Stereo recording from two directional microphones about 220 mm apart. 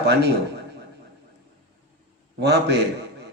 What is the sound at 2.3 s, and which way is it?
Speech, 50° right (ahead or behind).